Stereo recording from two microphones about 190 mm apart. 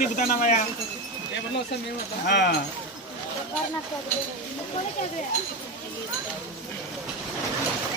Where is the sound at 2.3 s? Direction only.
65° left (ahead or behind).